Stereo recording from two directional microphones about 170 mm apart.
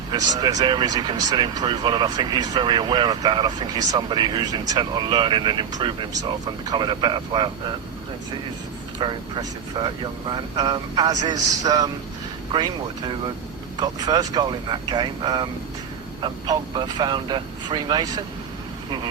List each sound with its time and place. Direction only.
0.1 s speech: 25° right (ahead or behind)
9.0 s speech: 30° right (ahead or behind)
13.7 s speech: 25° right (ahead or behind)